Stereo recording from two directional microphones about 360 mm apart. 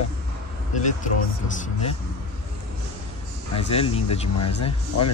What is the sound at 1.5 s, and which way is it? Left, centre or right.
Speech, centre.